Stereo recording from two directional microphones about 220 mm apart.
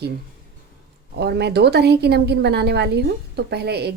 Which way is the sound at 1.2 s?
50° right (ahead or behind).